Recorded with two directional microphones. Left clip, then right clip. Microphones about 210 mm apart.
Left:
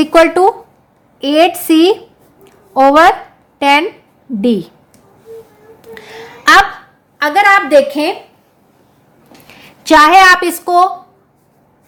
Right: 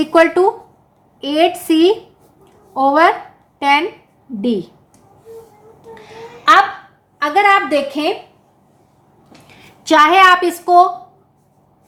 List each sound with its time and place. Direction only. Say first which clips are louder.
0.0 s a woman's voice: left 4 dB; 35° left (ahead or behind)
2.4 s a sound: left 6 dB; 40° left (ahead or behind)
3.6 s a woman's voice: left 4 dB; 40° left (ahead or behind)
5.9 s a sound: left 4 dB; 50° left (ahead or behind)
7.2 s a woman's voice: left 3 dB; 40° left (ahead or behind)
9.5 s a woman's voice: left 5 dB; 35° left (ahead or behind)